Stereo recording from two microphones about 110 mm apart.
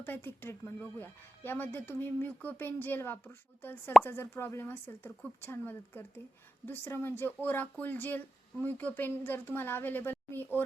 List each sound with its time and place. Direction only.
0.0 s speech: 20° left (ahead or behind)